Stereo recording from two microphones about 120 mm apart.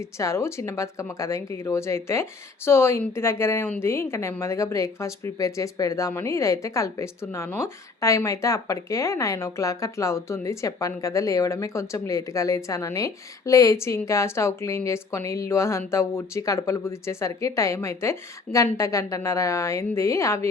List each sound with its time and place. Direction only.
0.2 s a woman's voice: 25° left (ahead or behind)